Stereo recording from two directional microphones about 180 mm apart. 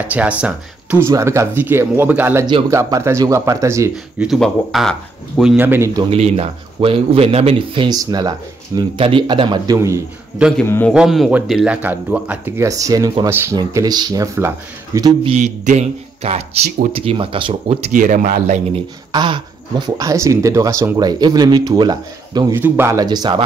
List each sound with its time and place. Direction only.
0.1 s speech: 10° right (ahead or behind)
4.3 s speech: centre (ahead or behind)
6.0 s speech: 35° right (ahead or behind)
10.9 s speech: centre (ahead or behind); by 15.3 s 25° right (ahead or behind)
15.3 s speech: 40° right (ahead or behind)
19.1 s speech: 25° right (ahead or behind)